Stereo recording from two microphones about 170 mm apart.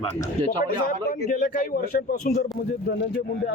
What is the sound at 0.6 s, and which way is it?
A man's voice, 60° left (ahead or behind).